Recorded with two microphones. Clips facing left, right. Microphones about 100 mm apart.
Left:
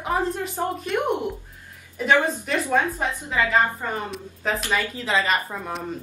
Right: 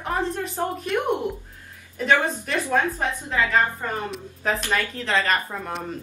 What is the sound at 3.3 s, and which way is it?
A woman's voice, 5° left (ahead or behind).